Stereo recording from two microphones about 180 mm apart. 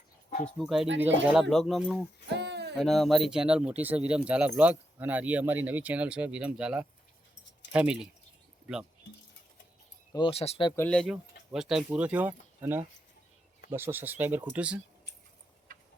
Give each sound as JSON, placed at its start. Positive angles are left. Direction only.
{"t": 0.3, "sound": "a sound", "side_deg": 35}
{"t": 0.6, "sound": "speech", "side_deg": -5}
{"t": 2.3, "sound": "a sound", "side_deg": -70}
{"t": 2.7, "sound": "speech", "side_deg": 0}
{"t": 10.1, "sound": "speech", "side_deg": 25}
{"t": 10.8, "sound": "speech", "side_deg": 5}
{"t": 11.0, "sound": "speech", "side_deg": -5}